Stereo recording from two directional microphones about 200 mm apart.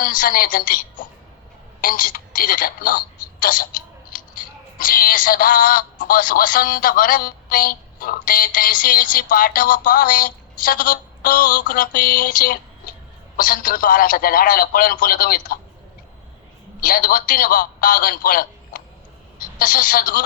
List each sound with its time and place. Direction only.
0.0 s speech: 45° left (ahead or behind)
3.4 s a sound: 45° left (ahead or behind)
4.8 s speech: 45° left (ahead or behind)
16.8 s speech: 45° left (ahead or behind)